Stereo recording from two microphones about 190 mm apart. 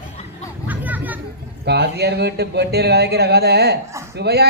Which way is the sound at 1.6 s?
60° right (ahead or behind).